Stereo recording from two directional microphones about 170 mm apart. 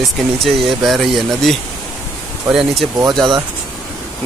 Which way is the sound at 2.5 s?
Centre (ahead or behind).